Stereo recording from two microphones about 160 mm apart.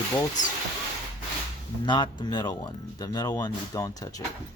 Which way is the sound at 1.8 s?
30° left (ahead or behind).